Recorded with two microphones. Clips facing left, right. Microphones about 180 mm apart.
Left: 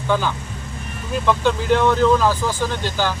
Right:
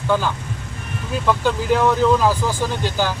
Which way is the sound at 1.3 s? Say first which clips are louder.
Left 1 dB; 5° right (ahead or behind).